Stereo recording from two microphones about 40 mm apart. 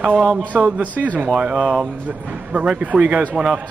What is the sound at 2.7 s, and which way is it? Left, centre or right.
Speech, right.